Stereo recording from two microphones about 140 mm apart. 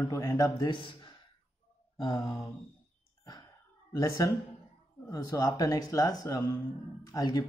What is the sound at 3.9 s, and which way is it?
Speech, 25° left (ahead or behind).